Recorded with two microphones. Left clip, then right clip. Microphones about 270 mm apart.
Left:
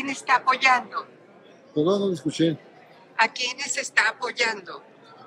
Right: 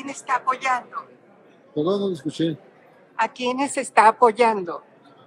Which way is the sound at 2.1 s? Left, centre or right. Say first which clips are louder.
Left 1 dB; left.